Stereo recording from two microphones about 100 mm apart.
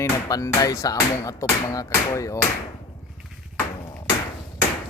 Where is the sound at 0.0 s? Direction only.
35° left (ahead or behind).